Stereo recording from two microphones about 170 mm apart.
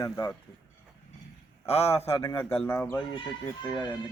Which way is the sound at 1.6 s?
40° left (ahead or behind).